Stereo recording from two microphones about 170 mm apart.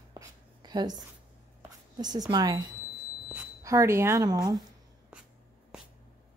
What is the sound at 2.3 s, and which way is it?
Speech, 25° right (ahead or behind).